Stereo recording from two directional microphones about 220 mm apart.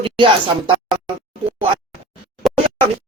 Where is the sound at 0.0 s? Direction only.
25° right (ahead or behind).